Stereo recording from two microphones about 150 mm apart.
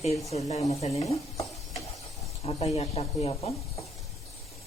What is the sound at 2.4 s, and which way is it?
Speech, 45° left (ahead or behind).